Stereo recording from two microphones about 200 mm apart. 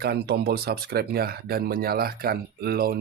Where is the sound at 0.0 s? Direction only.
50° right (ahead or behind).